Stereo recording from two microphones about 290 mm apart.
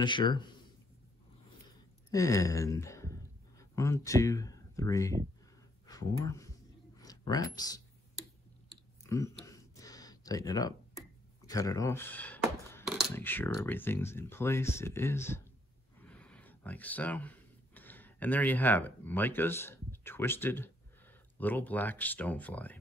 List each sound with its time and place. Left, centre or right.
0.0 s speech: centre
2.0 s speech: centre
9.0 s a sound: centre
11.4 s speech: centre
12.7 s coin: centre
13.1 s speech: centre